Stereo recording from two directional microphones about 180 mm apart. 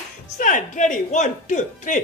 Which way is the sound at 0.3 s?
45° left (ahead or behind).